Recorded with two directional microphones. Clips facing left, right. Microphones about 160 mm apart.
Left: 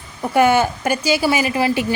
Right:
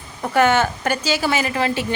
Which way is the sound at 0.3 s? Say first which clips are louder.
Left 2 dB; 10° left (ahead or behind).